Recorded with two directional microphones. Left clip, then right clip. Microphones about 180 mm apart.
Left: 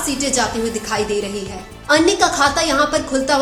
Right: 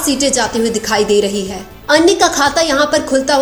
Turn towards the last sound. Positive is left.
turn(degrees=-35)  # may be behind; listen again after turning